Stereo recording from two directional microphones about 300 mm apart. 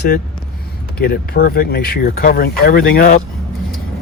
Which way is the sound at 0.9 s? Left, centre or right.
Left.